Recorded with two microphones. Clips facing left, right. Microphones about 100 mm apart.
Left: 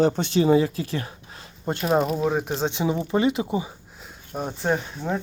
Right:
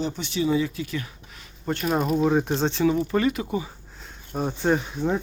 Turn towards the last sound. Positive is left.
turn(degrees=0)  # may be behind; listen again after turning